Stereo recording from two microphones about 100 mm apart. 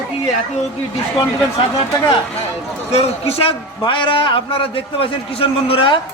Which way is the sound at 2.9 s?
90° left.